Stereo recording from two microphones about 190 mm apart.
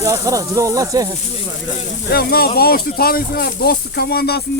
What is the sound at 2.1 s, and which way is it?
Speech, 55° left (ahead or behind).